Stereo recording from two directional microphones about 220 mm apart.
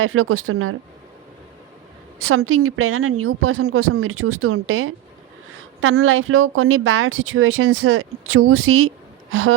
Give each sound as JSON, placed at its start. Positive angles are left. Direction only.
{"t": 0.0, "sound": "speech", "side_deg": -70}
{"t": 2.1, "sound": "speech", "side_deg": -70}